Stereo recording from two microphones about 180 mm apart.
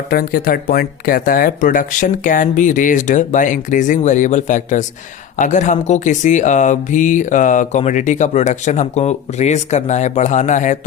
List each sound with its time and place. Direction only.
0.1 s speech: 55° left (ahead or behind)